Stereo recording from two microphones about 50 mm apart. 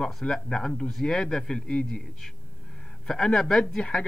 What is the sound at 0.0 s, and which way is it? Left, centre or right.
Speech, centre.